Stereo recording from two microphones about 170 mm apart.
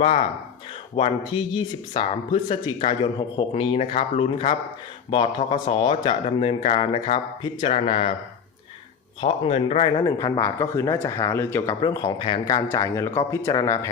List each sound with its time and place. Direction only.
0.0 s speech: 35° left (ahead or behind)
9.2 s speech: 30° left (ahead or behind)
10.0 s speech: 20° left (ahead or behind)
12.2 s speech: 30° left (ahead or behind)
12.6 s speech: 15° left (ahead or behind)